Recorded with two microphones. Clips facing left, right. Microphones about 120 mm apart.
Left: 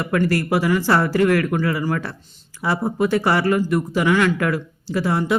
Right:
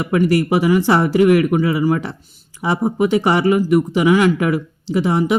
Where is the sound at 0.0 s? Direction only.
15° right (ahead or behind).